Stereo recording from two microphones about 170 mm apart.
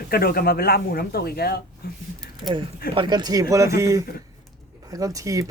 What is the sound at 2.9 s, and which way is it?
Speech, 25° right (ahead or behind).